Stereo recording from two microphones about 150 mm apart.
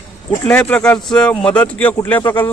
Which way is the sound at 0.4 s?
10° left (ahead or behind).